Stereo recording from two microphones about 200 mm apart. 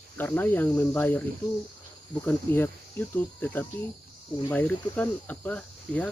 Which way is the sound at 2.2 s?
10° left (ahead or behind).